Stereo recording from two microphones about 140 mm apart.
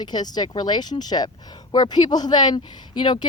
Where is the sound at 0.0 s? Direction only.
30° left (ahead or behind).